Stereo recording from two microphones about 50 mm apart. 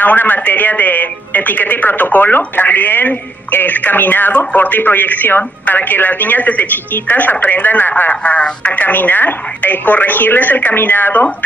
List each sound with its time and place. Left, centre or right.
0.0 s speech: left
8.7 s speech: left